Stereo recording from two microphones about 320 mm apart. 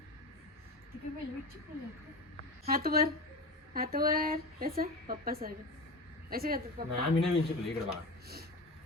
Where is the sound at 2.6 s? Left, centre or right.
Right.